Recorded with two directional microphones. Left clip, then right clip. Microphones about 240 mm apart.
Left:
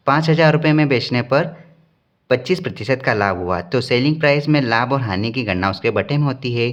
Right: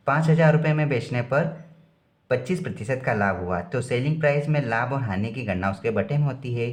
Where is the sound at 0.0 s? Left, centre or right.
Left.